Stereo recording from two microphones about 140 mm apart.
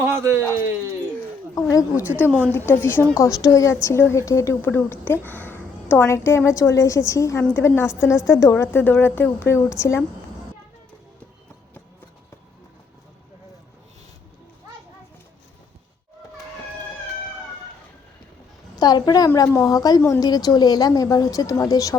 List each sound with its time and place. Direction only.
0.0 s a sound: 20° right (ahead or behind)
1.5 s a woman's voice: 25° left (ahead or behind)
2.0 s a woman's voice: 10° right (ahead or behind)
2.5 s a woman's voice: 15° left (ahead or behind)
18.8 s a woman's voice: 30° left (ahead or behind)